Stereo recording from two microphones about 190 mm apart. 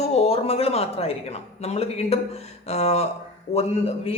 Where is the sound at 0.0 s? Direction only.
35° left (ahead or behind).